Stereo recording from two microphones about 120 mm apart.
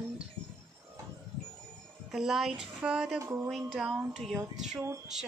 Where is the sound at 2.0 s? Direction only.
5° right (ahead or behind).